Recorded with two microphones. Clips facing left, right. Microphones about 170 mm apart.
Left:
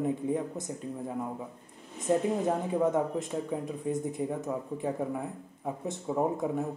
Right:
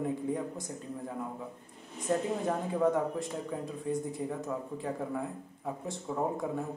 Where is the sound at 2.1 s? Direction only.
15° left (ahead or behind).